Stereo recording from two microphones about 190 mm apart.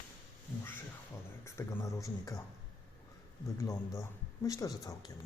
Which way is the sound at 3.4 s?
15° left (ahead or behind).